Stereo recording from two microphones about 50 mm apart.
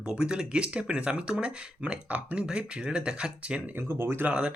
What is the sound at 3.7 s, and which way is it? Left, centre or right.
Speech, right.